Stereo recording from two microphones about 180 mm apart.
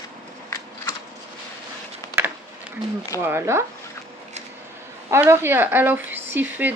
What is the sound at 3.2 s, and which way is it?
Speech, 10° right (ahead or behind).